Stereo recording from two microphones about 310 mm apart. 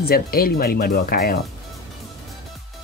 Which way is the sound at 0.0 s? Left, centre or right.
Left.